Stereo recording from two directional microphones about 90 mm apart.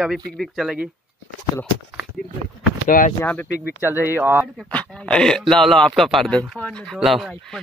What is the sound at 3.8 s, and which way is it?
Speech, 25° right (ahead or behind).